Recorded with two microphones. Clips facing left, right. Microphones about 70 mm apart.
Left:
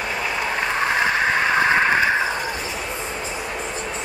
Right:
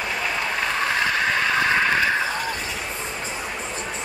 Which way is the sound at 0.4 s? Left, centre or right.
Centre.